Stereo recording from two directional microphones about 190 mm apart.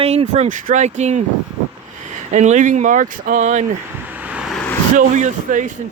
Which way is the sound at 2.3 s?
40° right (ahead or behind).